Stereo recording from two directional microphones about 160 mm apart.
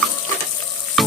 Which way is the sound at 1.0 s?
Centre (ahead or behind).